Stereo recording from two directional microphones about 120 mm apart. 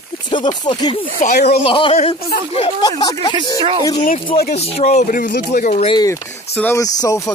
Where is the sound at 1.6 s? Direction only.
45° left (ahead or behind).